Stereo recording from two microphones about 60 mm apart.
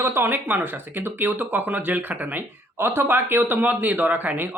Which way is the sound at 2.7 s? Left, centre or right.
Right.